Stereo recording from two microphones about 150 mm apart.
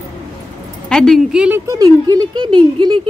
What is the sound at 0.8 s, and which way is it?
Speech, 5° left (ahead or behind).